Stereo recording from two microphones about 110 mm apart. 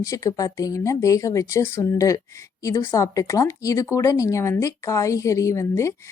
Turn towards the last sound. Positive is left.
turn(degrees=25)  # may be behind; listen again after turning